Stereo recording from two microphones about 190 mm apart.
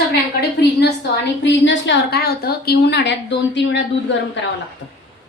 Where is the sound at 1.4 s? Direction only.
65° left (ahead or behind).